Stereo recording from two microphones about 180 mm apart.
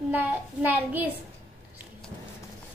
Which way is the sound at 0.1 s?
10° right (ahead or behind).